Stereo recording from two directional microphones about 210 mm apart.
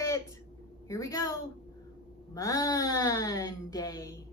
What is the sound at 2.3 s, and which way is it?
A woman's voice, 15° left (ahead or behind).